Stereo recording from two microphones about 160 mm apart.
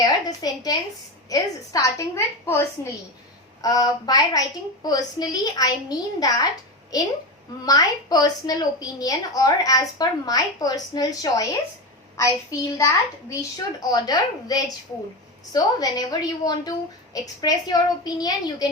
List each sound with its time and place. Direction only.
0.0 s a woman's voice: 25° left (ahead or behind)
7.6 s a woman's voice: 25° left (ahead or behind)